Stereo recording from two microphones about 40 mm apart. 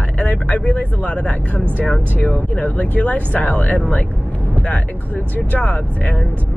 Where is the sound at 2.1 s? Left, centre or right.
Left.